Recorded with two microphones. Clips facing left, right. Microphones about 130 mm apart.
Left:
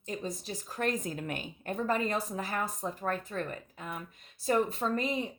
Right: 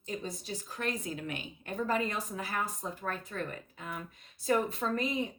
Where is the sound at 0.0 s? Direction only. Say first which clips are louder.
Left 2 dB; 35° left (ahead or behind).